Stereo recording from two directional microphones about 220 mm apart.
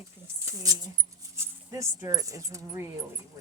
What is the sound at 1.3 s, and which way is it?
Speech, 15° right (ahead or behind).